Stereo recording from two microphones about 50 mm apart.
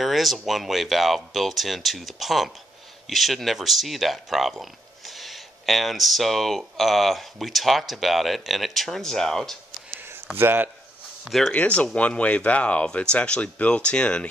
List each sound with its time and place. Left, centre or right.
0.0 s speech: centre
10.3 s speech: right
11.2 s speech: centre
11.5 s speech: left